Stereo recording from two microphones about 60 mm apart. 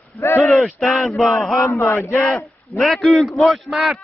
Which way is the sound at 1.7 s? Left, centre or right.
Left.